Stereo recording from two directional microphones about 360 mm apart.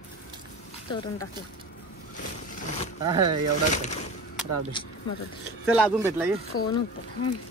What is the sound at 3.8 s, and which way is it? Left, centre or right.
Speech, centre.